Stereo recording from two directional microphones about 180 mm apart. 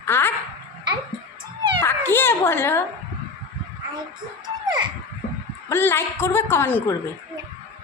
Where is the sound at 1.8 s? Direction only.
10° left (ahead or behind).